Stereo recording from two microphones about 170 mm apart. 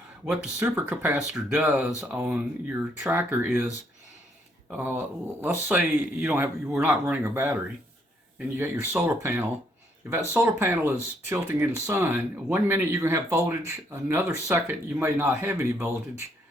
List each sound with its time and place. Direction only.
0.3 s speech: 5° right (ahead or behind)
5.4 s speech: 10° right (ahead or behind)